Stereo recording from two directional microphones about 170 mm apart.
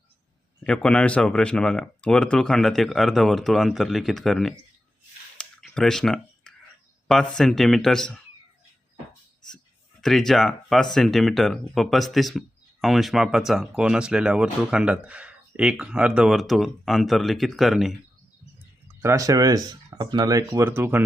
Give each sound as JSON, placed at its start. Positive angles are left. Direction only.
{"t": 0.6, "sound": "speech", "side_deg": 5}
{"t": 5.4, "sound": "a sound", "side_deg": 5}
{"t": 7.1, "sound": "speech", "side_deg": 5}
{"t": 10.0, "sound": "speech", "side_deg": 0}
{"t": 18.6, "sound": "speech", "side_deg": -15}
{"t": 20.6, "sound": "speech", "side_deg": -15}